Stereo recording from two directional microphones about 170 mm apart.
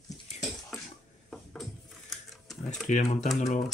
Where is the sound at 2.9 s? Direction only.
45° left (ahead or behind).